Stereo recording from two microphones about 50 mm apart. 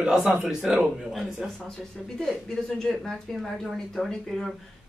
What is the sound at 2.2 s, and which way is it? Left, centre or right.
Speech, centre.